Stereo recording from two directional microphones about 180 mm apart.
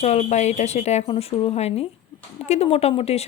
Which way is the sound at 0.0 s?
40° left (ahead or behind).